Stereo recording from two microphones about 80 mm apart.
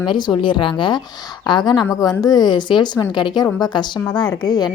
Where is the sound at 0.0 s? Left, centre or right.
Left.